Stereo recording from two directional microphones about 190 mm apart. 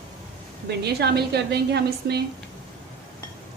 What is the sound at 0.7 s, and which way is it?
Speech, 60° right (ahead or behind).